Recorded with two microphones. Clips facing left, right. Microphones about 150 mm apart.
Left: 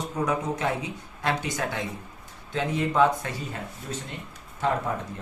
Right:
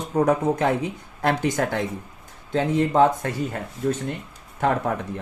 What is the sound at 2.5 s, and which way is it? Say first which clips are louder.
Speech: right 5 dB; 35° right (ahead or behind).